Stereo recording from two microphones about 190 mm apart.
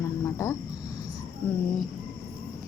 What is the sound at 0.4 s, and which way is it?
Speech, 15° left (ahead or behind).